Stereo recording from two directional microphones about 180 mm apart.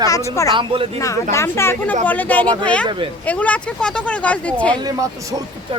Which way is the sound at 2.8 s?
25° right (ahead or behind).